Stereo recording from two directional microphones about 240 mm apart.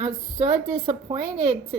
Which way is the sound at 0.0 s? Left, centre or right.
Centre.